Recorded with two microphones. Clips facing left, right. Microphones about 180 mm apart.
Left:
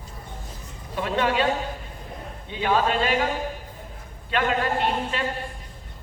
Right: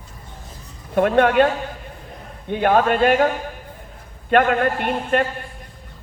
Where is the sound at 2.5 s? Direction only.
55° right (ahead or behind).